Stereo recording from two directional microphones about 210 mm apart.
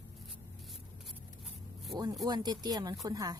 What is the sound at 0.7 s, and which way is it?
Vehicle, centre (ahead or behind).